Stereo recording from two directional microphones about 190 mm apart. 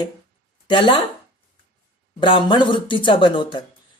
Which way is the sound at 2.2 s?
25° left (ahead or behind).